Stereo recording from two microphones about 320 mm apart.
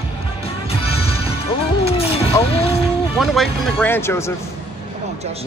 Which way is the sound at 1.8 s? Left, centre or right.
Centre.